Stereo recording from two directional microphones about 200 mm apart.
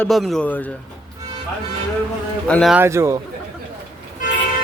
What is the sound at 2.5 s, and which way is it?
Speech, centre (ahead or behind).